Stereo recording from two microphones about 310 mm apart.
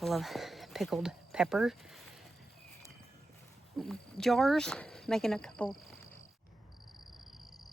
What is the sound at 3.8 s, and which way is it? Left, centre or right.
Speech, centre.